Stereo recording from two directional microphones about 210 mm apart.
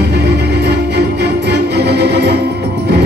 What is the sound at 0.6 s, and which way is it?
Music, 50° right (ahead or behind).